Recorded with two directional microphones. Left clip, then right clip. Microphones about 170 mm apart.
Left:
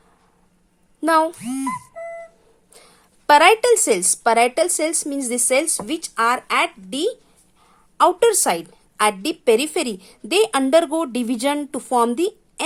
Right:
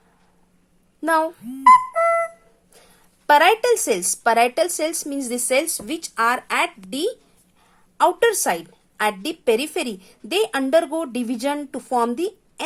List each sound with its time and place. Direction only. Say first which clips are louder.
1.0 s a woman's voice: left 3 dB; 25° left (ahead or behind)
1.9 s flute: right 14 dB; 65° right (ahead or behind)
2.7 s a woman's voice: left 4 dB; 20° left (ahead or behind)